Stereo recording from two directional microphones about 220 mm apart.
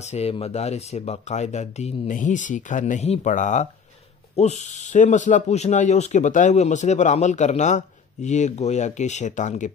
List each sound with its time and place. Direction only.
0.0 s speech: 30° left (ahead or behind)